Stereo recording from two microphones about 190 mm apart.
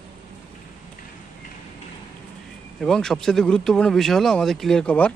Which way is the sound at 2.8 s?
5° left (ahead or behind).